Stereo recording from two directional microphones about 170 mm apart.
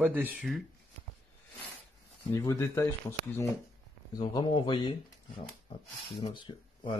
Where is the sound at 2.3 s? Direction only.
20° left (ahead or behind).